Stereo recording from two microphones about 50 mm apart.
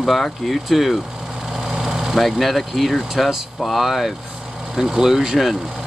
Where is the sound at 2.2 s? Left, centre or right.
Centre.